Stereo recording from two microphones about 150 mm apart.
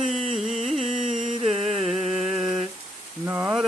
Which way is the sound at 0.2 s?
45° right (ahead or behind).